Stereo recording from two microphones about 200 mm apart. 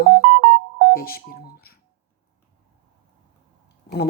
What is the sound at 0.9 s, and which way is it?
Telephone dialing, 50° left (ahead or behind).